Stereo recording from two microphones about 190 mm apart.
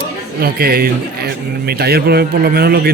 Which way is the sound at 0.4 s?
55° right (ahead or behind).